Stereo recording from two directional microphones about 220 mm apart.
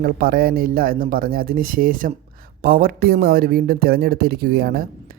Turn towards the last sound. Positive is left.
turn(degrees=-45)  # may be behind; listen again after turning